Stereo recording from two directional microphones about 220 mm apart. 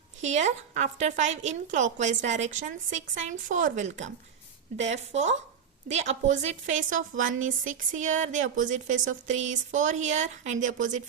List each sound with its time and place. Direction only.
0.2 s a woman's voice: 30° right (ahead or behind)